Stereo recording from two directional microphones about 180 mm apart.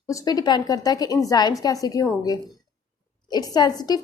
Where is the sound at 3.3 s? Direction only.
20° left (ahead or behind).